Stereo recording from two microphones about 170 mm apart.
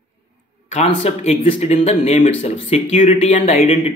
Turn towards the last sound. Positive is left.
turn(degrees=40)  # may be behind; listen again after turning